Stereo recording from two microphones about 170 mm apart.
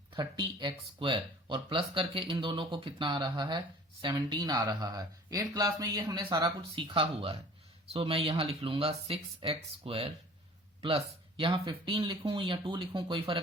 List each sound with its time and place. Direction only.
0.1 s speech: 25° right (ahead or behind)